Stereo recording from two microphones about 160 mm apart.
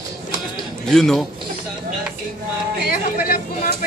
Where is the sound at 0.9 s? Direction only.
Centre (ahead or behind).